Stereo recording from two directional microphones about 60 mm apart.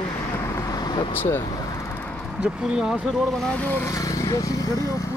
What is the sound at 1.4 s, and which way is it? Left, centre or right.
Vehicle, left.